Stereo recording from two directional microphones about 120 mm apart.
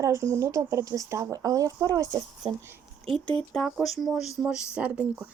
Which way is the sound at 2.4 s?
50° right (ahead or behind).